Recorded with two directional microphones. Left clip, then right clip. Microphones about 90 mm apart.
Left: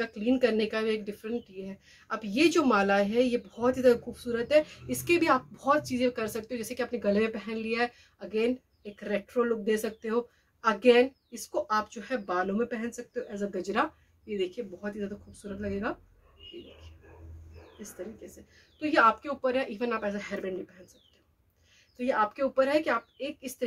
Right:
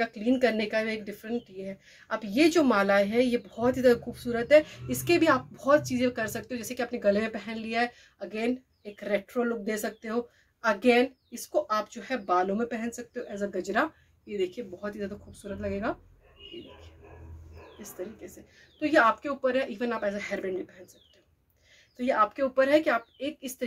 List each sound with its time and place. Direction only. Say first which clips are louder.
0.0 s a woman's voice: right 1 dB; 25° left (ahead or behind)
18.8 s speech: right 1 dB; 35° left (ahead or behind)
21.9 s a woman's voice: right 2 dB; 25° left (ahead or behind)